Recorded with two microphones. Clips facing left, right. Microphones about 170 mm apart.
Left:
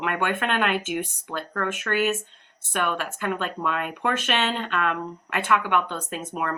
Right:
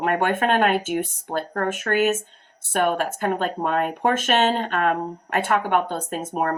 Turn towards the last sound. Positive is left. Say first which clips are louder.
# right 5 dB
turn(degrees=-40)  # may be behind; listen again after turning